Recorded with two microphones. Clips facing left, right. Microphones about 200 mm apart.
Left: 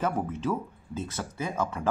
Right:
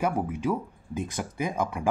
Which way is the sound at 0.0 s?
10° right (ahead or behind).